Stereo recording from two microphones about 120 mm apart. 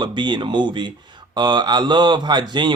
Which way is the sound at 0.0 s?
40° right (ahead or behind).